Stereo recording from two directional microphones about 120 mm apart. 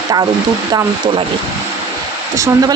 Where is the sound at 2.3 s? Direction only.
30° right (ahead or behind).